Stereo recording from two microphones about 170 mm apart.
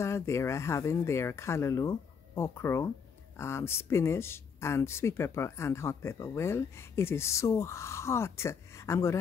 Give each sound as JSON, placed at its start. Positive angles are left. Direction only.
{"t": 0.0, "sound": "speech", "side_deg": 15}